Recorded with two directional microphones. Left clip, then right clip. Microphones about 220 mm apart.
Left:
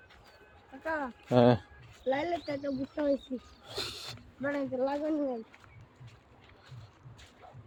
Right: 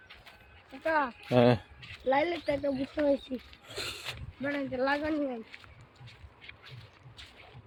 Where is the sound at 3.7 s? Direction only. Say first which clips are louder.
Even; 15° left (ahead or behind).